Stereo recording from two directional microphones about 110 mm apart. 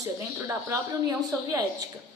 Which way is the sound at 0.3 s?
20° right (ahead or behind).